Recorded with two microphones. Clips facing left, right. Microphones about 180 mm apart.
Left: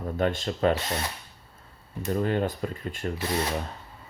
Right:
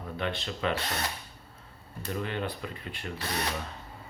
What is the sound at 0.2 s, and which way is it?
Speech, 45° left (ahead or behind).